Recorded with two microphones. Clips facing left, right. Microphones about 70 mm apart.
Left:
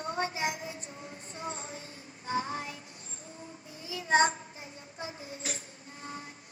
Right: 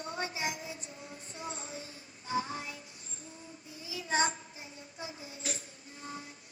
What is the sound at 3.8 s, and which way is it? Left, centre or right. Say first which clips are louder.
Child singing: left 6 dB; left.